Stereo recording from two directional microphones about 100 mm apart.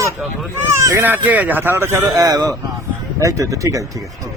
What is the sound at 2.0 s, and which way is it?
Speech, 35° right (ahead or behind).